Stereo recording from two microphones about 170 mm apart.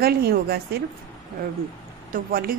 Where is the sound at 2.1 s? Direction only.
60° right (ahead or behind).